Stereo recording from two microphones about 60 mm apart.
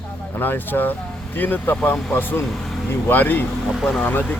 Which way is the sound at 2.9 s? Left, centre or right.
Left.